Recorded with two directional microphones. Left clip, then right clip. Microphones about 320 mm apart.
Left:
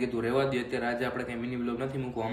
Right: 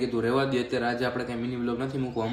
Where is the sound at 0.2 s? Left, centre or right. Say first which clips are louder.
Right 3 dB; centre.